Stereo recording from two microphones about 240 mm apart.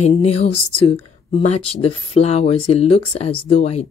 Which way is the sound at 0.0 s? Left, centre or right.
Left.